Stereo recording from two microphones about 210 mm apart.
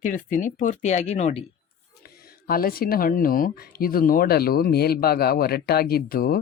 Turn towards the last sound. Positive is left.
turn(degrees=45)  # may be behind; listen again after turning